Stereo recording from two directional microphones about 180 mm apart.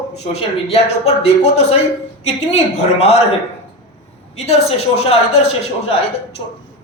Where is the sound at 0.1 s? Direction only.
35° left (ahead or behind).